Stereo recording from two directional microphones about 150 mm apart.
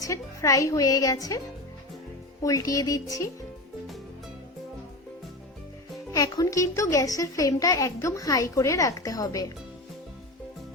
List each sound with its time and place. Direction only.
0.0 s a woman's voice: 20° left (ahead or behind)
2.4 s a woman's voice: 25° left (ahead or behind)
6.1 s a woman's voice: 25° left (ahead or behind)